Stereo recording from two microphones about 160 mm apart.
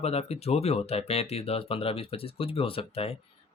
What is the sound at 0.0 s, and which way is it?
Speech, 40° left (ahead or behind).